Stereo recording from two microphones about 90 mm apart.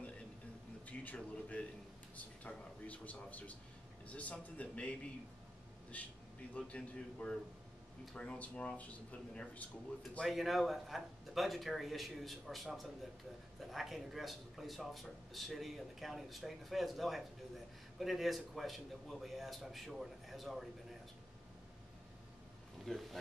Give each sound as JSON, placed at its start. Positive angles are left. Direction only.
{"t": 0.8, "sound": "a sound", "side_deg": 15}
{"t": 2.1, "sound": "speech", "side_deg": 15}
{"t": 5.9, "sound": "speech", "side_deg": 15}
{"t": 10.2, "sound": "speech", "side_deg": 0}
{"t": 22.9, "sound": "speech", "side_deg": 5}